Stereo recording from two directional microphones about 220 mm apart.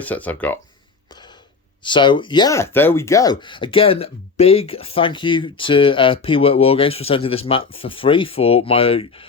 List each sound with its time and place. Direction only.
0.0 s speech: 5° left (ahead or behind)
1.8 s speech: 20° left (ahead or behind)